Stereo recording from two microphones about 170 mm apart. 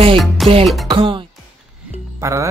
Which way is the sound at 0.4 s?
Centre (ahead or behind).